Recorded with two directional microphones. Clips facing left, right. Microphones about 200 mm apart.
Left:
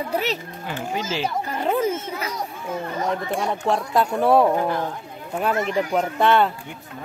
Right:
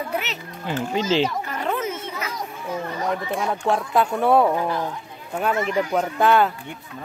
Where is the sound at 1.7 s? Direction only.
30° left (ahead or behind).